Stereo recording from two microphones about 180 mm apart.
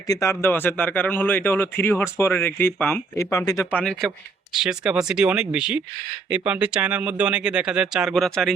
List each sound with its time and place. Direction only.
0.1 s a man's voice: 15° left (ahead or behind)
3.7 s a man's voice: 5° left (ahead or behind)